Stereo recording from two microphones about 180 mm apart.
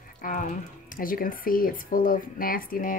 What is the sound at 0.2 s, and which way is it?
Speech, 45° left (ahead or behind).